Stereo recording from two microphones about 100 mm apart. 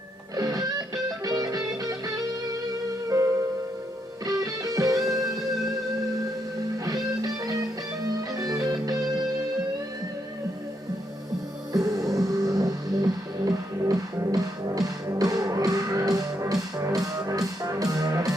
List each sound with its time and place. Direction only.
0.3 s music: 40° right (ahead or behind)
4.3 s music: 40° right (ahead or behind)
6.8 s music: 40° right (ahead or behind)
11.7 s music: 40° right (ahead or behind)